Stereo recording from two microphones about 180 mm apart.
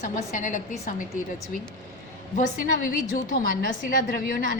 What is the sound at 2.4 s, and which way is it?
A woman's voice, 50° left (ahead or behind).